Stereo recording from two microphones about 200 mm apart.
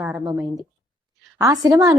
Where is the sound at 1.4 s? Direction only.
20° right (ahead or behind).